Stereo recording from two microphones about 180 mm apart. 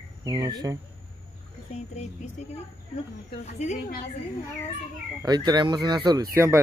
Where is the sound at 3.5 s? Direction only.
40° left (ahead or behind).